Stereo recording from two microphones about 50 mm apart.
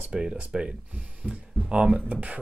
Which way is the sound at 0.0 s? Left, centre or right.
Right.